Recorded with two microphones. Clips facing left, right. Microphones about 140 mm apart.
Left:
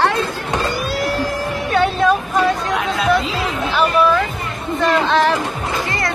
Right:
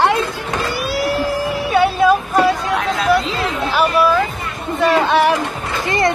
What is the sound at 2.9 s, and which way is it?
Chatter, centre (ahead or behind).